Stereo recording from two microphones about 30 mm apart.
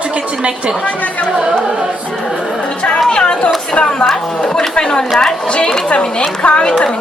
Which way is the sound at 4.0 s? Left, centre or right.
Centre.